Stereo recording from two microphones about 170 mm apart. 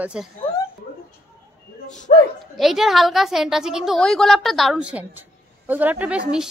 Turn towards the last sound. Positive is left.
turn(degrees=-5)  # may be behind; listen again after turning